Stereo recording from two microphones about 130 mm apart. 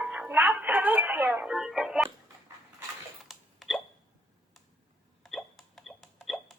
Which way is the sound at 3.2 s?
Centre (ahead or behind).